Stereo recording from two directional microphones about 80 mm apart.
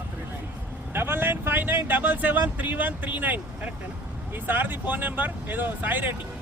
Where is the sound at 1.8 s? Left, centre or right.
Right.